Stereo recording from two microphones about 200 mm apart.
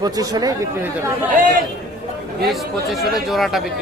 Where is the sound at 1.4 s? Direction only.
45° right (ahead or behind).